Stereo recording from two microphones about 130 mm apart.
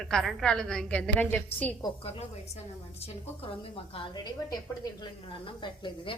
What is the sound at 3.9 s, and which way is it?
A woman's voice, 35° left (ahead or behind).